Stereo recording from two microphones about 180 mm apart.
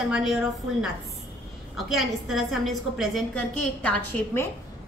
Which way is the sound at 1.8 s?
Centre (ahead or behind).